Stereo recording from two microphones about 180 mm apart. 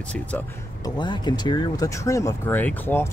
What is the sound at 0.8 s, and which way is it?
Speech, 25° left (ahead or behind).